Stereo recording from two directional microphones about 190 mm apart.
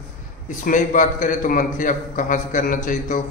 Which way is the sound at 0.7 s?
45° left (ahead or behind).